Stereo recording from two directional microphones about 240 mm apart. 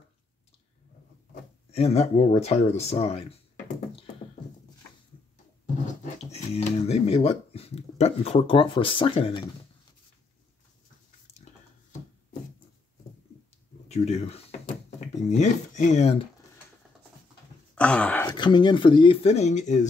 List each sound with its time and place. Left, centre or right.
1.3 s speech: left
6.0 s speech: left
13.8 s speech: left
17.7 s a sound: centre
18.3 s speech: centre